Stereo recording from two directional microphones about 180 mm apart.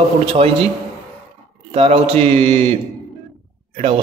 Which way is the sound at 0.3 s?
30° right (ahead or behind).